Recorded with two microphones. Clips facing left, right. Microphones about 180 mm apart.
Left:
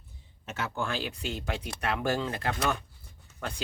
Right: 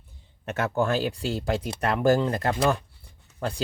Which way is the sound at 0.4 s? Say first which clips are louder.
Right 8 dB; 55° right (ahead or behind).